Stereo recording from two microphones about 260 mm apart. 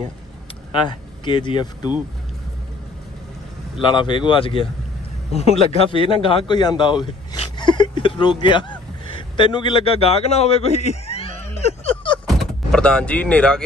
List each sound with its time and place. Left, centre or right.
0.8 s speech: centre
3.8 s a man's voice: centre
12.3 s vehicle: centre